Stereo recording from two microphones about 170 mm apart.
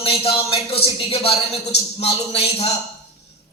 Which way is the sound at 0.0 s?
35° left (ahead or behind).